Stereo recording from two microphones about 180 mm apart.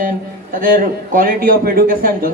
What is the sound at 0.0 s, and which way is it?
A man's voice, 50° right (ahead or behind).